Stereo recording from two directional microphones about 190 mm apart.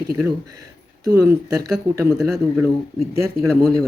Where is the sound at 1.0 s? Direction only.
20° right (ahead or behind).